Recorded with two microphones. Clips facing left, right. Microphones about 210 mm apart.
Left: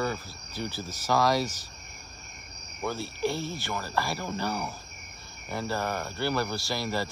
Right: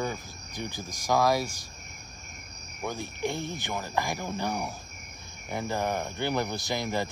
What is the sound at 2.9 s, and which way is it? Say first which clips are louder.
Speech: left 2 dB; 15° right (ahead or behind).